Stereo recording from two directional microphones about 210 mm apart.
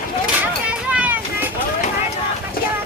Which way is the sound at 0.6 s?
5° right (ahead or behind).